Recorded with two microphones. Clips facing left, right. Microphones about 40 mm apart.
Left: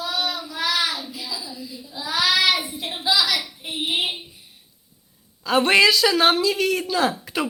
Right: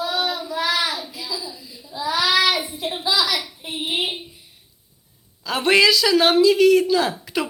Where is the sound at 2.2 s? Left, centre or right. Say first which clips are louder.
Even; right.